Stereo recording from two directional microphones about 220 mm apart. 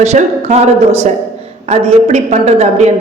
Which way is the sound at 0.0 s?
30° right (ahead or behind).